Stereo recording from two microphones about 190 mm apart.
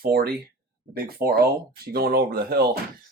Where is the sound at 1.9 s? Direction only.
55° right (ahead or behind).